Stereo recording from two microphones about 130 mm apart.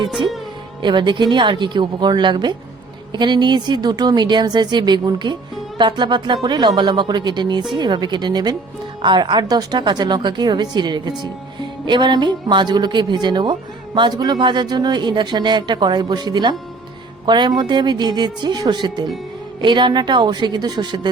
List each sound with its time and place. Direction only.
0.8 s speech: 35° right (ahead or behind)